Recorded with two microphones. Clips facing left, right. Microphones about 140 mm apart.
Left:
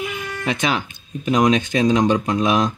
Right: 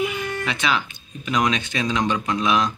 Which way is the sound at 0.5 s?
45° left (ahead or behind).